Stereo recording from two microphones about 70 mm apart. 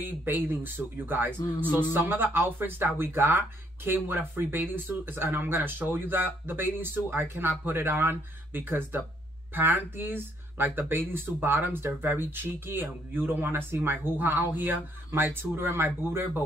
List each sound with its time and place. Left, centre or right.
0.0 s speech: right